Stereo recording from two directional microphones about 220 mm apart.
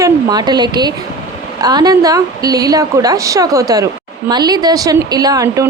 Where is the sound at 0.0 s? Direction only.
15° right (ahead or behind).